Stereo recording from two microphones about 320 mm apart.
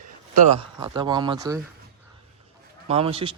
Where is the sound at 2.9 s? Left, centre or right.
Centre.